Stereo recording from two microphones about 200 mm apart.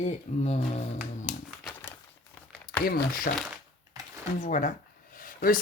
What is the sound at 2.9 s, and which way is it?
Speech, 45° left (ahead or behind).